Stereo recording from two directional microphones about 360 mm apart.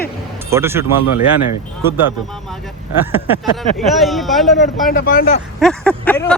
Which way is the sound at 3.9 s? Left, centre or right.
Centre.